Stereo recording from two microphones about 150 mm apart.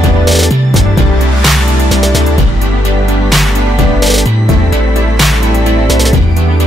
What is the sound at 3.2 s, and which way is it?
Music, centre (ahead or behind).